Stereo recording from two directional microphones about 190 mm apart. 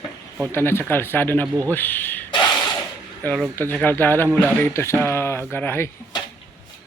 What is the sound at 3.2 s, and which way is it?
Speech, 5° left (ahead or behind).